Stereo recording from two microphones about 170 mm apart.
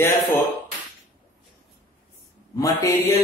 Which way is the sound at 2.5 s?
20° left (ahead or behind).